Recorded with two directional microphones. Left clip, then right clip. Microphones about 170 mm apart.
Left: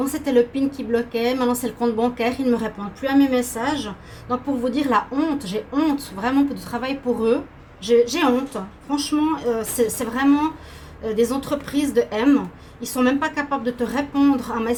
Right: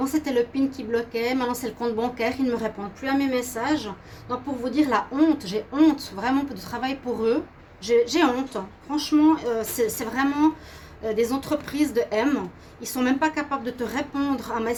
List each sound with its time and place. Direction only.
0.0 s a woman's voice: 40° right (ahead or behind)